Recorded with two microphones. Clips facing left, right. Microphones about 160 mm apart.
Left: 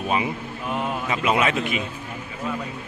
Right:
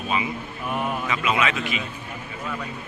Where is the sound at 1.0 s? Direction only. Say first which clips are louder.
Left 4 dB; 45° left (ahead or behind).